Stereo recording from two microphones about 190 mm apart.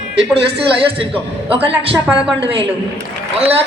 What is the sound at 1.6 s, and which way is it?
Speech, 30° right (ahead or behind).